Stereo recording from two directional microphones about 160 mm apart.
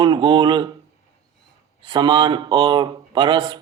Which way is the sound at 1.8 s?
30° right (ahead or behind).